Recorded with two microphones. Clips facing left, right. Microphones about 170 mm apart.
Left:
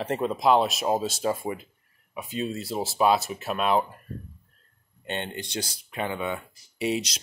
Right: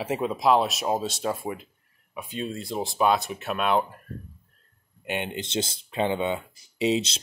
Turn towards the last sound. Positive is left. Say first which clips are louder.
# right 3 dB
turn(degrees=-25)  # may be behind; listen again after turning